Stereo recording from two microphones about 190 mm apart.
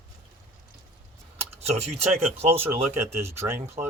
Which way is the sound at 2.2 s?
35° right (ahead or behind).